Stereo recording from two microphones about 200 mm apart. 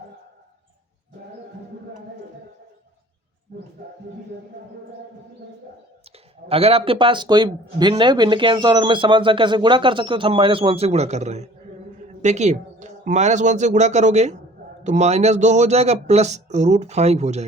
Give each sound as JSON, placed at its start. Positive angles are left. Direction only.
{"t": 6.5, "sound": "speech", "side_deg": -30}